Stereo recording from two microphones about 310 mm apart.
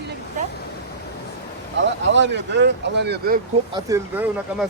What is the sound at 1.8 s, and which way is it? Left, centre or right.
Speech, right.